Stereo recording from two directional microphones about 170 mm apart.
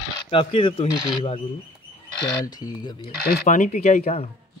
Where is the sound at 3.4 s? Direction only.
45° left (ahead or behind).